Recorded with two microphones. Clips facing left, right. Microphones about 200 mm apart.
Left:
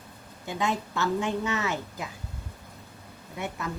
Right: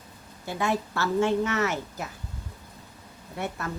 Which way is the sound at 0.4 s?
15° left (ahead or behind).